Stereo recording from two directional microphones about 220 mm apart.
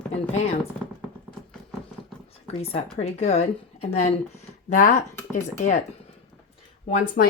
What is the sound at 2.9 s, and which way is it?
Speech, 30° left (ahead or behind).